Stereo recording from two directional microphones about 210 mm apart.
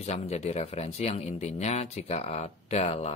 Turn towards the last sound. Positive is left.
turn(degrees=30)  # may be behind; listen again after turning